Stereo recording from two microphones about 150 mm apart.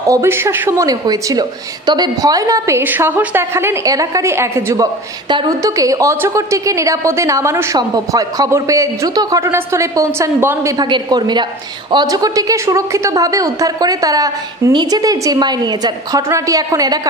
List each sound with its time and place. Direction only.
0.1 s a woman's voice: 15° right (ahead or behind)
5.3 s a woman's voice: 30° right (ahead or behind)
5.6 s a woman's voice: 20° right (ahead or behind)
10.8 s a woman's voice: 30° right (ahead or behind)